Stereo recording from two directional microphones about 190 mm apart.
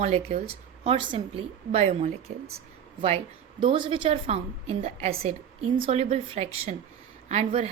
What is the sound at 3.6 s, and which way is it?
A woman's voice, 25° right (ahead or behind).